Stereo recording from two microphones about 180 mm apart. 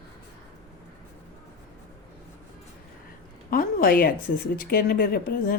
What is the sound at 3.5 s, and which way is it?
A woman's voice, 55° left (ahead or behind).